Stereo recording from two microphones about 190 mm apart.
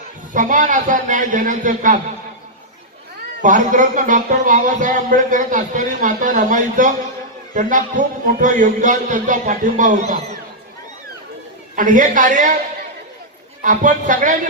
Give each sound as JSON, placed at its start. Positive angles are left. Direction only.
{"t": 0.3, "sound": "speech", "side_deg": -45}
{"t": 3.4, "sound": "speech", "side_deg": -40}
{"t": 11.8, "sound": "speech", "side_deg": -45}
{"t": 13.6, "sound": "speech", "side_deg": -40}